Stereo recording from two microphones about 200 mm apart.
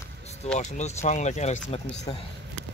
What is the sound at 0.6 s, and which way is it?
Speech, 35° left (ahead or behind).